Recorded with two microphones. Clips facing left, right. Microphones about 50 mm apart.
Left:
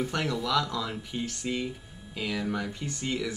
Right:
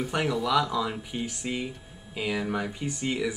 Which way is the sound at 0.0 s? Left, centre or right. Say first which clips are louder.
Right 2 dB; centre.